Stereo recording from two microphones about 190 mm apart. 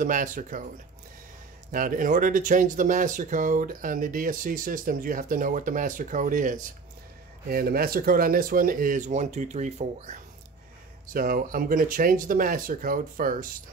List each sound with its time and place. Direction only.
0.0 s speech: 45° right (ahead or behind)
1.7 s speech: 45° right (ahead or behind)
11.1 s speech: 50° right (ahead or behind)